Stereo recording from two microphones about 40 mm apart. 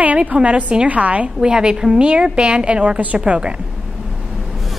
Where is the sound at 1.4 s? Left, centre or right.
Centre.